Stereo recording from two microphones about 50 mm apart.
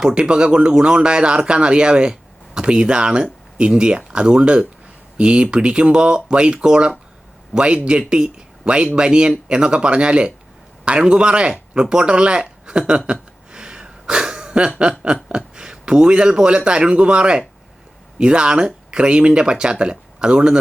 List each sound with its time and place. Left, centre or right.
0.0 s a man's voice: centre
13.1 s a sound: centre
14.8 s a man's voice: centre